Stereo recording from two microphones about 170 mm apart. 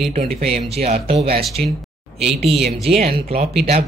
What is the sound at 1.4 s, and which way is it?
Speech, centre (ahead or behind).